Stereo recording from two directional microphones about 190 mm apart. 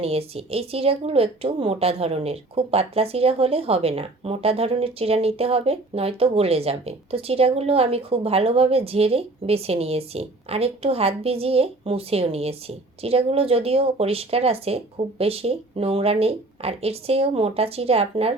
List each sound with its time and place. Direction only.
0.0 s a woman's voice: 30° right (ahead or behind)